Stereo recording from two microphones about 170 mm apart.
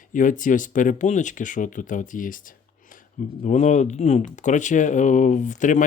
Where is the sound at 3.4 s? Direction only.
45° left (ahead or behind).